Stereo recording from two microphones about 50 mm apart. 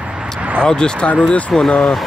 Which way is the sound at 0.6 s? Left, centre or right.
Centre.